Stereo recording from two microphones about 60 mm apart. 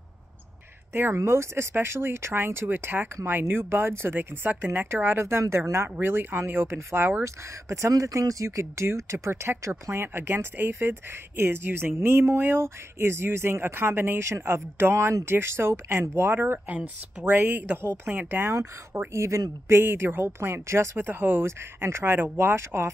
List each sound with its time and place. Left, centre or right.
0.9 s speech: right
5.2 s speech: right
5.9 s speech: right
7.7 s speech: right
16.6 s speech: right
17.3 s speech: right
19.7 s speech: right
21.1 s speech: right